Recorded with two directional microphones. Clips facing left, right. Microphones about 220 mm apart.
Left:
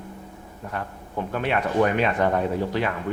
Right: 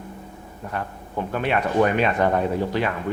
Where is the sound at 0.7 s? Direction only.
25° right (ahead or behind).